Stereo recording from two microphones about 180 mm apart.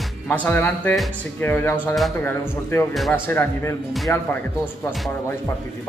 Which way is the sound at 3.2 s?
10° left (ahead or behind).